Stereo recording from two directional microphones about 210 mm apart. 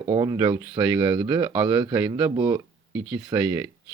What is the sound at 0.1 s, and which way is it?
Speech, 20° right (ahead or behind).